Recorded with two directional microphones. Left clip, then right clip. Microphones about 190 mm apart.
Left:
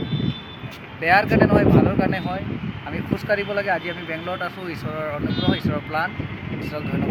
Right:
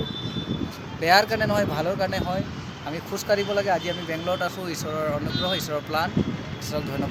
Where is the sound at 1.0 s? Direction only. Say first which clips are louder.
Left 2 dB; 15° right (ahead or behind).